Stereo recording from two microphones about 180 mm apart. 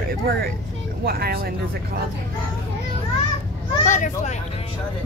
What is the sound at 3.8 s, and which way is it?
Speech, 45° left (ahead or behind).